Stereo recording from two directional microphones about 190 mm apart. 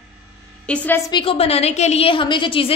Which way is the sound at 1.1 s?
30° left (ahead or behind).